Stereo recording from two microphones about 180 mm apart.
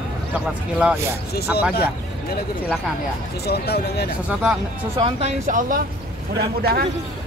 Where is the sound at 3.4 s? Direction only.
60° left (ahead or behind).